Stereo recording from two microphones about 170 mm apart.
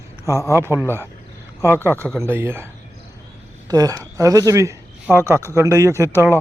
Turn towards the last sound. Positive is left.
turn(degrees=-15)  # may be behind; listen again after turning